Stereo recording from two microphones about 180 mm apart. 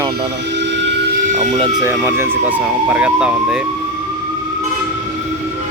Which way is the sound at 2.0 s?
10° right (ahead or behind).